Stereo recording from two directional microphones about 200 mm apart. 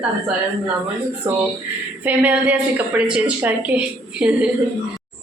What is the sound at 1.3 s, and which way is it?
A woman's voice, 15° right (ahead or behind).